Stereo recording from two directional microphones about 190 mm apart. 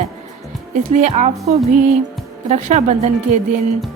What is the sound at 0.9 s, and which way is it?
Speech, 35° right (ahead or behind).